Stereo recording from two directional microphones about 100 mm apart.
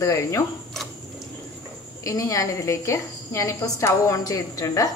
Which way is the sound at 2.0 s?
35° left (ahead or behind).